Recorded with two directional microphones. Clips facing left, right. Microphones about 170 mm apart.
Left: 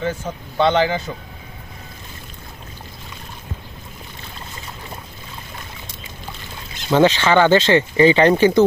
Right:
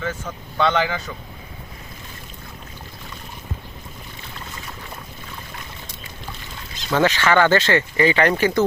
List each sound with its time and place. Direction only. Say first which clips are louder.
0.0 s speech: left 4 dB; 30° left (ahead or behind)
6.9 s speech: left 4 dB; 20° left (ahead or behind)